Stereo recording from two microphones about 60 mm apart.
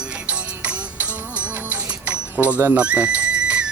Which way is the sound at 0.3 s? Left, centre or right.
Right.